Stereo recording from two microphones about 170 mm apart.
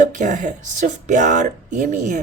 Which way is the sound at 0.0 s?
50° right (ahead or behind).